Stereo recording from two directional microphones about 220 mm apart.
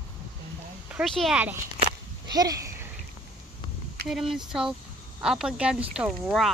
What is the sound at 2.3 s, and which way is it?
Speech, 15° right (ahead or behind).